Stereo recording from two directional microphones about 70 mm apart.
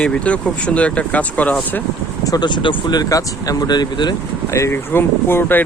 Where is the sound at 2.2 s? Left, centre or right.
Left.